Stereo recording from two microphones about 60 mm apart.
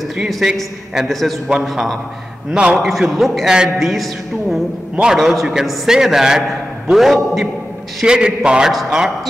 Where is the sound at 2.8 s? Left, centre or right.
Centre.